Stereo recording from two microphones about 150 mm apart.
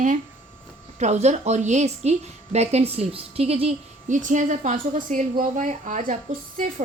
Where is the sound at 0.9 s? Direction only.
50° right (ahead or behind).